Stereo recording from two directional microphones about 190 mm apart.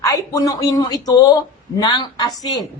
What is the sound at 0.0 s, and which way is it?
A man's voice, 15° left (ahead or behind).